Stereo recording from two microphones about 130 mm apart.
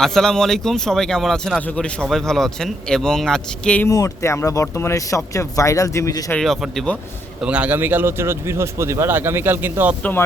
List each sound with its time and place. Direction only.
0.0 s a man's voice: 5° left (ahead or behind)
3.8 s speech: 25° left (ahead or behind)
6.3 s a man's voice: centre (ahead or behind)
7.4 s a man's voice: 10° right (ahead or behind)
10.0 s speech: 15° left (ahead or behind)